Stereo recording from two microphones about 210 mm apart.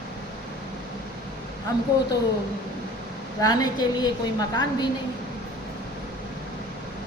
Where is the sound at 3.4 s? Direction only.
20° left (ahead or behind).